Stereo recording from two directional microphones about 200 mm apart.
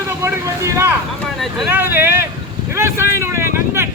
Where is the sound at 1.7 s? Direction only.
10° right (ahead or behind).